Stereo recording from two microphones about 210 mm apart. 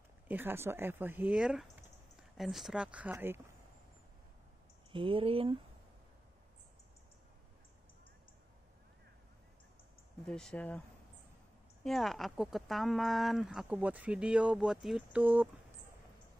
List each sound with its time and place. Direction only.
0.3 s speech: 10° right (ahead or behind)
4.9 s speech: 25° right (ahead or behind)
10.2 s speech: 5° left (ahead or behind)
11.8 s speech: centre (ahead or behind)